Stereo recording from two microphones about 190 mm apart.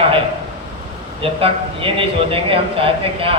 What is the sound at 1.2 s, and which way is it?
A man's voice, 30° right (ahead or behind).